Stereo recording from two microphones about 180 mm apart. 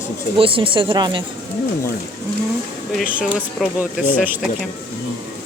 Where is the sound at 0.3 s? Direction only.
30° right (ahead or behind).